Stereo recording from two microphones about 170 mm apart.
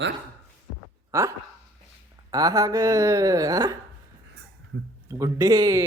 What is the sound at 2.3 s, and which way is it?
A man's voice, 20° right (ahead or behind).